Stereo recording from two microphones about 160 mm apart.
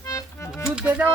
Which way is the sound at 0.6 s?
5° right (ahead or behind).